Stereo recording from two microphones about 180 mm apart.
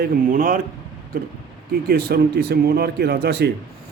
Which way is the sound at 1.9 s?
60° right (ahead or behind).